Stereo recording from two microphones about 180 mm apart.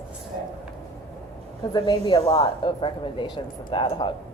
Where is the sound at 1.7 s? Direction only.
25° left (ahead or behind).